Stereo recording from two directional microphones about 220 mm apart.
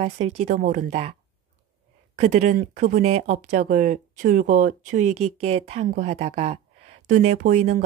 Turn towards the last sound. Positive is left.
turn(degrees=-35)  # may be behind; listen again after turning